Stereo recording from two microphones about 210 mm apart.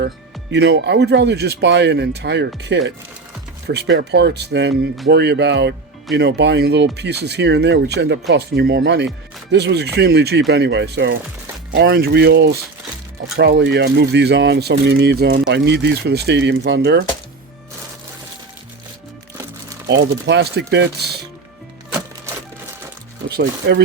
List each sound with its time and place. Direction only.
0.5 s speech: 55° right (ahead or behind)
19.9 s speech: 55° right (ahead or behind)
23.3 s speech: 50° right (ahead or behind)